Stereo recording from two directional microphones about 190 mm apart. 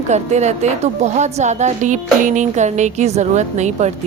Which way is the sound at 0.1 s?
35° right (ahead or behind).